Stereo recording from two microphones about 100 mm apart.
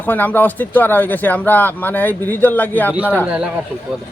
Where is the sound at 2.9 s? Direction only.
15° right (ahead or behind).